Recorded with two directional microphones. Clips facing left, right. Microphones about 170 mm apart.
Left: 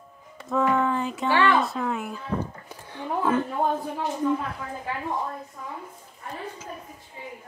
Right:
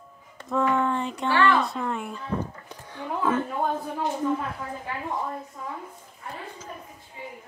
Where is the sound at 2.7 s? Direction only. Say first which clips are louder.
Left 5 dB; 15° left (ahead or behind).